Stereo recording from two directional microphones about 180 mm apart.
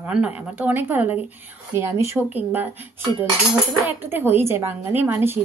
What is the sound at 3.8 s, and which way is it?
Speech, 10° right (ahead or behind).